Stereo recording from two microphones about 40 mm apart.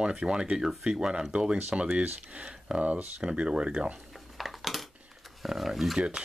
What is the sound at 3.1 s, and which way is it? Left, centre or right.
Speech, right.